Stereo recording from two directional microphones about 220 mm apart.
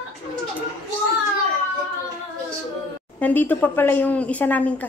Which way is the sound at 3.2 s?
5° left (ahead or behind).